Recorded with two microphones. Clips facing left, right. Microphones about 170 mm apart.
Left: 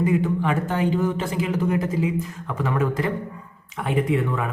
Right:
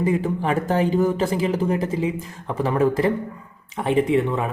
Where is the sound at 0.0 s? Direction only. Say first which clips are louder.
Even; 35° right (ahead or behind).